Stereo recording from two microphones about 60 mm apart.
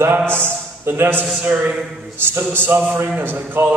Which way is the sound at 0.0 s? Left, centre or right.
Right.